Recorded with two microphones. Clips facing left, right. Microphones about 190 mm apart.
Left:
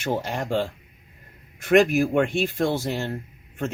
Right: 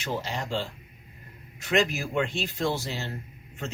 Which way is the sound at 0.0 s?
50° left (ahead or behind).